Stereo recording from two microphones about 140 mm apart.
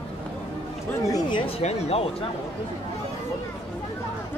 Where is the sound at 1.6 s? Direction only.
50° left (ahead or behind).